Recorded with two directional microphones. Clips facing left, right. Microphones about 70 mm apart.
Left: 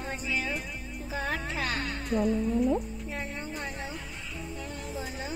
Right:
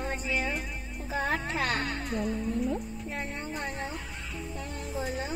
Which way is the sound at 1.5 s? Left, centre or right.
Right.